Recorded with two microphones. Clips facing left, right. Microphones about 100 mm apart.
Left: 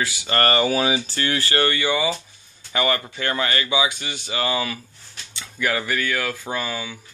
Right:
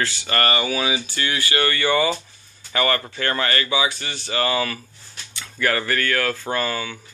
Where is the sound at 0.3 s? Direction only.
35° left (ahead or behind).